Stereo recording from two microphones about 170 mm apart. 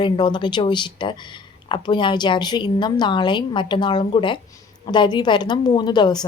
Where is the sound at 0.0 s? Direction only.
25° left (ahead or behind).